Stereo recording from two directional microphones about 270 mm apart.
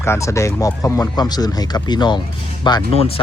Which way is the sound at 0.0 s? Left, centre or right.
Centre.